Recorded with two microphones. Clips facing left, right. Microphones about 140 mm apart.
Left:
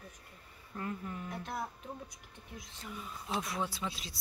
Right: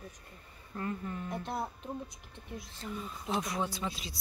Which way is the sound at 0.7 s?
5° left (ahead or behind).